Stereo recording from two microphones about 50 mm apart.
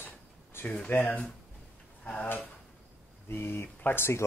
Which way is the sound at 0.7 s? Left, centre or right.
Left.